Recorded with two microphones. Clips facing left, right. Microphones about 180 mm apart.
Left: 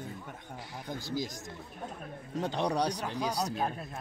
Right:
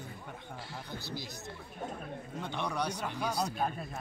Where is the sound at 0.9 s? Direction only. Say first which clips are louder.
Left 9 dB; 45° left (ahead or behind).